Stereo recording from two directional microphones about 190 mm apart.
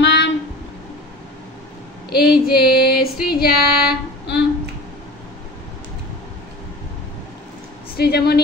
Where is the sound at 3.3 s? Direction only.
55° left (ahead or behind).